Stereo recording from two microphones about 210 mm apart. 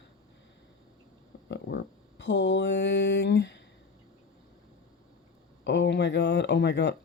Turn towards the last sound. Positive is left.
turn(degrees=55)  # may be behind; listen again after turning